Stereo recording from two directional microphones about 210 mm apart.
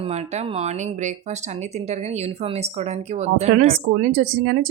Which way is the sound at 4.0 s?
45° right (ahead or behind).